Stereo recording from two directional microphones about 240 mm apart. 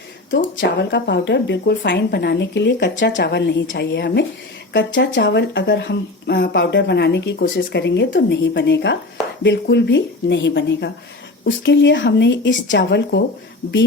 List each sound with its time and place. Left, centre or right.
0.3 s speech: left